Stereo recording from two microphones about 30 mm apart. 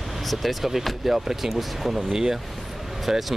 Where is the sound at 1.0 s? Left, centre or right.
Centre.